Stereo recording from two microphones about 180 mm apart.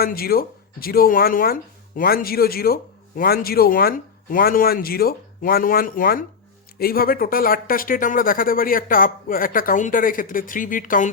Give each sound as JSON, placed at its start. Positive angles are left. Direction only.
{"t": 0.0, "sound": "speech", "side_deg": 55}